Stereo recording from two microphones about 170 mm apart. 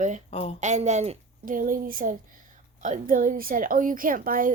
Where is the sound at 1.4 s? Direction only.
55° right (ahead or behind).